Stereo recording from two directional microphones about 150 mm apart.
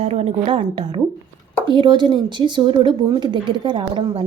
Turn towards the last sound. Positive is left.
turn(degrees=-35)  # may be behind; listen again after turning